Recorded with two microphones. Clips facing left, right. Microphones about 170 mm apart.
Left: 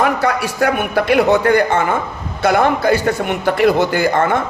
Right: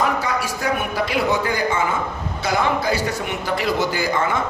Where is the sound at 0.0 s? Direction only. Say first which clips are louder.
Left 5 dB; 65° left (ahead or behind).